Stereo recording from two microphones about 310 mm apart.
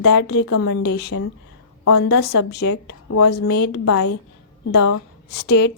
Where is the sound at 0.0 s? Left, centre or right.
Left.